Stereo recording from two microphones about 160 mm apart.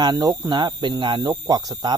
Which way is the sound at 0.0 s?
25° right (ahead or behind).